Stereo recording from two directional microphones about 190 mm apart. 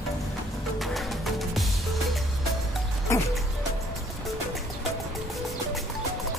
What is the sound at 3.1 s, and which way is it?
Music, 15° left (ahead or behind).